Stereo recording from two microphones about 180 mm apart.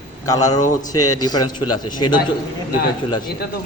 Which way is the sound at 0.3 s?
20° left (ahead or behind).